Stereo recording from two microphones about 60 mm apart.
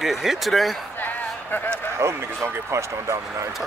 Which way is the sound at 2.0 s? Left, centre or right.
Right.